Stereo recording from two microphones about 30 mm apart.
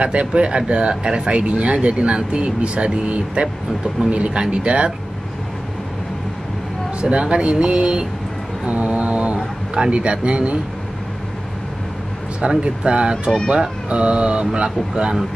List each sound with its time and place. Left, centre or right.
0.0 s speech: right
7.0 s speech: right
12.4 s speech: right